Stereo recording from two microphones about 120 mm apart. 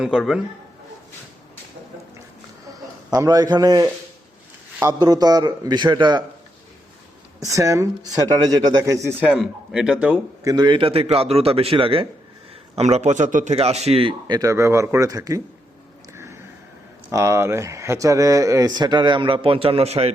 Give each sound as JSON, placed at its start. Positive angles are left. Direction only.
{"t": 0.0, "sound": "a man's voice", "side_deg": -5}
{"t": 3.1, "sound": "a man's voice", "side_deg": -30}
{"t": 7.3, "sound": "speech", "side_deg": -25}
{"t": 9.2, "sound": "speech", "side_deg": -10}
{"t": 10.4, "sound": "speech", "side_deg": -35}
{"t": 12.7, "sound": "speech", "side_deg": -65}
{"t": 16.1, "sound": "a sound", "side_deg": -20}
{"t": 17.1, "sound": "speech", "side_deg": -25}